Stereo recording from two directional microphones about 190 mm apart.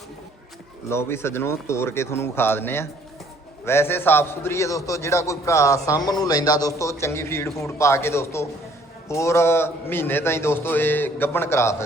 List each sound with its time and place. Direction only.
0.9 s a man's voice: 15° left (ahead or behind)